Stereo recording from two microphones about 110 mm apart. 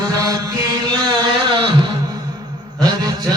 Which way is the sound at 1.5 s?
45° right (ahead or behind).